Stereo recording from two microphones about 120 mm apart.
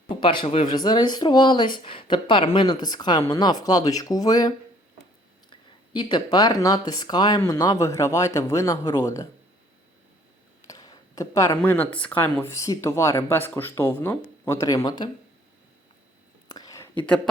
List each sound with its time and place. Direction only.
0.2 s speech: 45° left (ahead or behind)
0.7 s speech: 35° left (ahead or behind)
10.7 s a sound: 30° left (ahead or behind)
11.6 s speech: 15° left (ahead or behind)
12.5 s speech: 30° left (ahead or behind)
16.5 s whispering: 30° left (ahead or behind)